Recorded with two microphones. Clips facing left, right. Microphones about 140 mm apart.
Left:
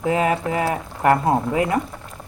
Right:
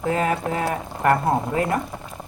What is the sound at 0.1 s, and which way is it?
Speech, 10° left (ahead or behind).